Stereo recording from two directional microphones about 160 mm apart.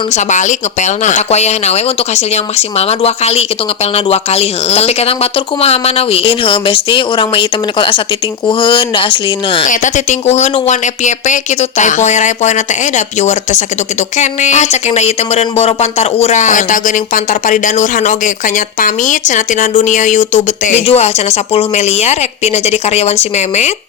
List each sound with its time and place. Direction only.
0.1 s speech: 50° left (ahead or behind); by 9.6 s 30° left (ahead or behind)
9.6 s speech: 50° left (ahead or behind)